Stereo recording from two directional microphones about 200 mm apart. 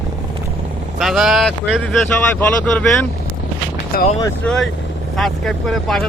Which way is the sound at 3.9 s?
35° left (ahead or behind).